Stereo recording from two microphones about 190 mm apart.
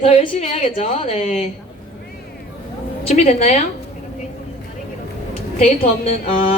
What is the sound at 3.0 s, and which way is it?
Speech, 35° left (ahead or behind).